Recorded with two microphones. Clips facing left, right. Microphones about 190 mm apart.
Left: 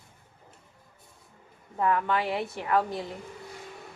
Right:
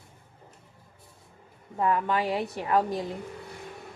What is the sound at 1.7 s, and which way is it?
A woman's voice, 20° right (ahead or behind).